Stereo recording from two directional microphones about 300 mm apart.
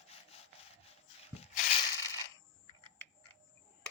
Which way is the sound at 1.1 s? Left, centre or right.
Centre.